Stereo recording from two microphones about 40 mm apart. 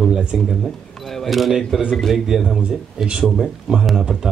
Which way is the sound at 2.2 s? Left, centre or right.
Centre.